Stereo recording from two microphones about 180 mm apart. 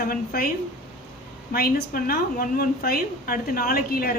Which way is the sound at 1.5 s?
55° left (ahead or behind).